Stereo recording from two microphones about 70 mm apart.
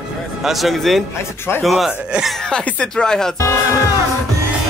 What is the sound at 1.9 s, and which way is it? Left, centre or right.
Speech, centre.